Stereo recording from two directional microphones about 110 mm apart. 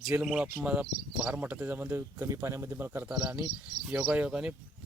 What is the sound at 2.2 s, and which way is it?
Speech, 30° right (ahead or behind).